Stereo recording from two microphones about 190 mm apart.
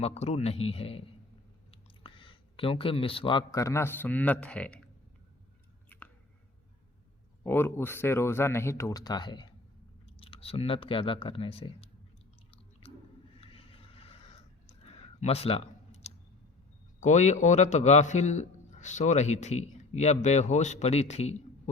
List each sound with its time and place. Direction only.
0.0 s a man's voice: 35° left (ahead or behind); by 4.8 s 5° left (ahead or behind)
5.9 s a sound: 10° left (ahead or behind)
7.4 s speech: 10° left (ahead or behind); by 11.9 s 30° left (ahead or behind)
12.8 s chewing: 30° left (ahead or behind)
13.4 s a sound: 30° left (ahead or behind)
17.0 s a man's voice: 40° left (ahead or behind)